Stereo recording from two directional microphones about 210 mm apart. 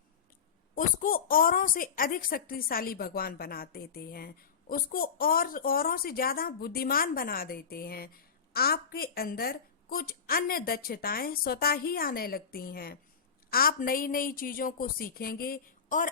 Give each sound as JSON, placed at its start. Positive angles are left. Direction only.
{"t": 0.8, "sound": "a woman's voice", "side_deg": 40}